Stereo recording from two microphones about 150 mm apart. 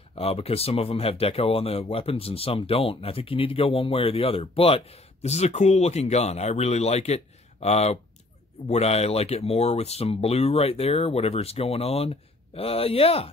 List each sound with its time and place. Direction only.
0.2 s speech: 40° left (ahead or behind)